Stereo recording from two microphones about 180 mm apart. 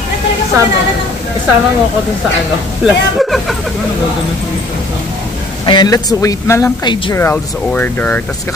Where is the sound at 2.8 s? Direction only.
Centre (ahead or behind).